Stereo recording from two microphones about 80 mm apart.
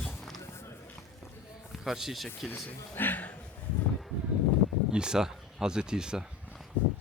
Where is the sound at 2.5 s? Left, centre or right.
Left.